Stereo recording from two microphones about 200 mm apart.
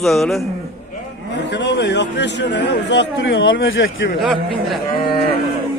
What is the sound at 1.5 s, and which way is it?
A man's voice, 60° left (ahead or behind).